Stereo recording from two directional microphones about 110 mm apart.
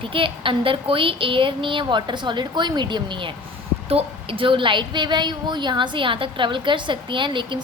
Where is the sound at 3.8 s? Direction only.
60° right (ahead or behind).